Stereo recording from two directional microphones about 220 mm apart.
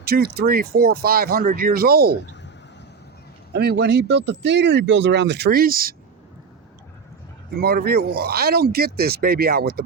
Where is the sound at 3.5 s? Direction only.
45° right (ahead or behind).